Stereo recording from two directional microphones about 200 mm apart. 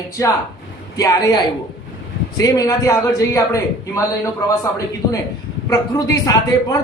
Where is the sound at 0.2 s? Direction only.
15° left (ahead or behind).